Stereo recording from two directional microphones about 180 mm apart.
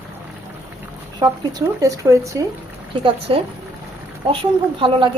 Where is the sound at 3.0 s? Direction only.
30° right (ahead or behind).